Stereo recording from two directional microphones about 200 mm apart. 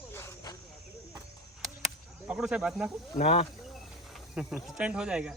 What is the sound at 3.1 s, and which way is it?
Speech, 30° left (ahead or behind).